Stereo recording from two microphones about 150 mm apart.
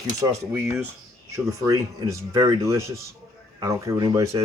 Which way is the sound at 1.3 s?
20° right (ahead or behind).